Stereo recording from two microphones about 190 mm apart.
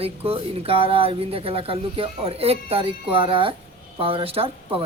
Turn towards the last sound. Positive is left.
turn(degrees=-30)  # may be behind; listen again after turning